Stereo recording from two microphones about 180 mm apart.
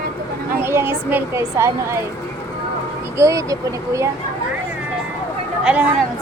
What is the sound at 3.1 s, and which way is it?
Speech, 15° right (ahead or behind).